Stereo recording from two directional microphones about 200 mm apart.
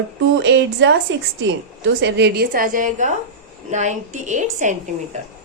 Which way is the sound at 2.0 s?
60° right (ahead or behind).